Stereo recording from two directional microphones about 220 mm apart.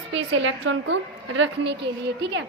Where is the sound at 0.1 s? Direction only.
55° right (ahead or behind).